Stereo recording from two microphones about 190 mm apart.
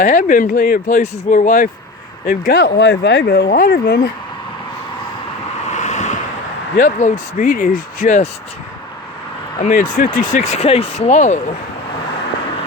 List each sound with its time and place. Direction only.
0.0 s speech: 40° left (ahead or behind); by 4.1 s 60° left (ahead or behind)
5.7 s vehicle: 40° left (ahead or behind)
6.7 s speech: 40° left (ahead or behind)
9.6 s speech: 40° left (ahead or behind)